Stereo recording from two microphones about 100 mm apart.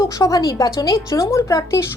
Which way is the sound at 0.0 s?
35° left (ahead or behind).